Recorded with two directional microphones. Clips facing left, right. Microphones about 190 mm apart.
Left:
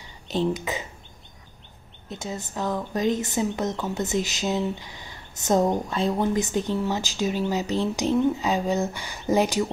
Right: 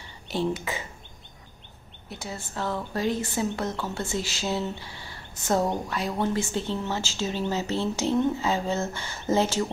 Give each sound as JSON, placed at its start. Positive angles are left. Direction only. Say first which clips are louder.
{"t": 0.5, "sound": "speech", "louder": "left 2 dB", "side_deg": 20}
{"t": 2.0, "sound": "a woman's voice", "louder": "left 4 dB", "side_deg": 20}